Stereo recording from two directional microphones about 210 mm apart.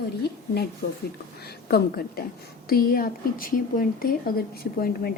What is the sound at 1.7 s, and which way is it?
A woman's voice, 45° left (ahead or behind).